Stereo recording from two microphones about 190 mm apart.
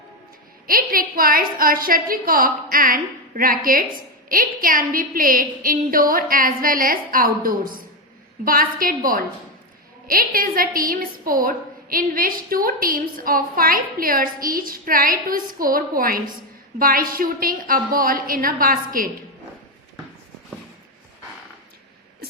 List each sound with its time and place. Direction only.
0.7 s a woman's voice: 50° right (ahead or behind)